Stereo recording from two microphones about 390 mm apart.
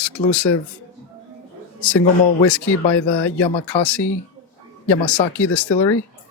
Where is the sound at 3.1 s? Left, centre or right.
Left.